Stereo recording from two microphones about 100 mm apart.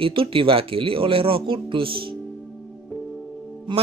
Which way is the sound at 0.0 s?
60° right (ahead or behind).